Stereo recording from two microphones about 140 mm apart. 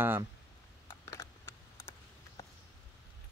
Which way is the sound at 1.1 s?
20° left (ahead or behind).